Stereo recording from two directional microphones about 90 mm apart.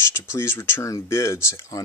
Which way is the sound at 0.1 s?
30° left (ahead or behind).